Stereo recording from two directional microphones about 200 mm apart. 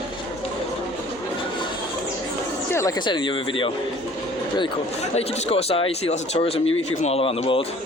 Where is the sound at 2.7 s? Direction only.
15° left (ahead or behind).